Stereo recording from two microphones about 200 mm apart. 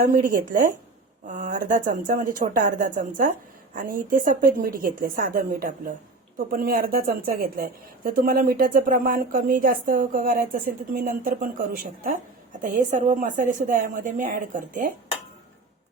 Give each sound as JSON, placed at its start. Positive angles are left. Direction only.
{"t": 0.0, "sound": "a woman's voice", "side_deg": -40}